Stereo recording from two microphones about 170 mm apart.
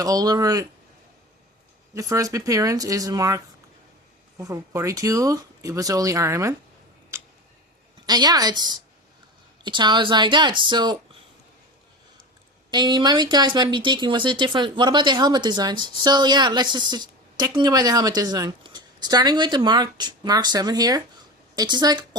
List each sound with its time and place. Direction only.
0.0 s speech: 20° right (ahead or behind)
2.0 s speech: 20° right (ahead or behind)
7.1 s tick-tock: 15° right (ahead or behind)
8.0 s speech: 25° right (ahead or behind)
12.7 s speech: 25° right (ahead or behind)